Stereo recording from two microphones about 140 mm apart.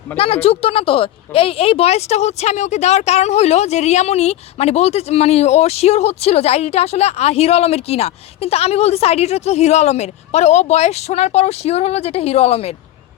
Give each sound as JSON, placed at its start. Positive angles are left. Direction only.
{"t": 0.2, "sound": "a woman's voice", "side_deg": 45}